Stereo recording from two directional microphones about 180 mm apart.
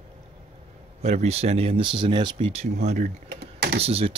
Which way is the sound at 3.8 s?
35° right (ahead or behind).